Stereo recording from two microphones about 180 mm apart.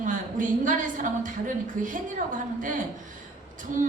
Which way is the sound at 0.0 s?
45° right (ahead or behind).